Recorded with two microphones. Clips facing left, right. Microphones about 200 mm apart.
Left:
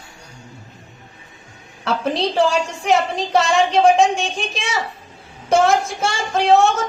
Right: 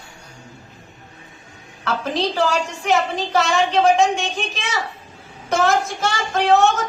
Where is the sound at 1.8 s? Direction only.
30° left (ahead or behind).